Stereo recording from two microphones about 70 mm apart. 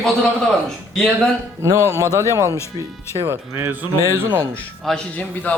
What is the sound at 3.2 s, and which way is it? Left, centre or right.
Speech, right.